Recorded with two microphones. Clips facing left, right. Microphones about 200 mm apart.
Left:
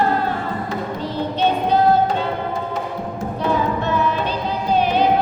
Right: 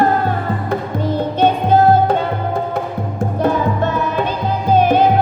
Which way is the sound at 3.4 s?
50° right (ahead or behind).